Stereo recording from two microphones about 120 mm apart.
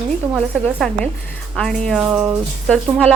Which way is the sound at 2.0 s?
15° right (ahead or behind).